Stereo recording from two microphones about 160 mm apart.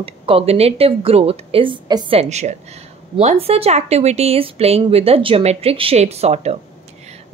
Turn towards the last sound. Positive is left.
turn(degrees=-40)  # may be behind; listen again after turning